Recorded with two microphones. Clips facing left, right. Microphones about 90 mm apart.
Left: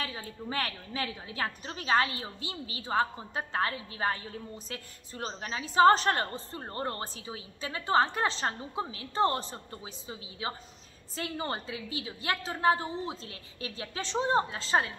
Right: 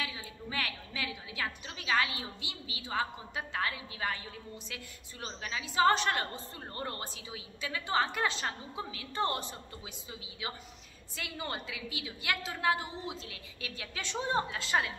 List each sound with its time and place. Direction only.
0.0 s a woman's voice: 40° left (ahead or behind)